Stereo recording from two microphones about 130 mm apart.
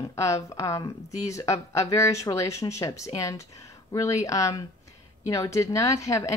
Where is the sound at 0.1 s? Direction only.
25° left (ahead or behind).